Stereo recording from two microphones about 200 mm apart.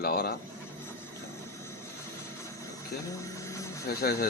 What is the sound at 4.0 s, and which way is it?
Speech, 50° left (ahead or behind).